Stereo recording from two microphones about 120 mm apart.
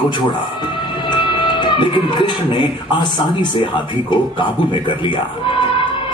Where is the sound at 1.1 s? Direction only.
40° left (ahead or behind).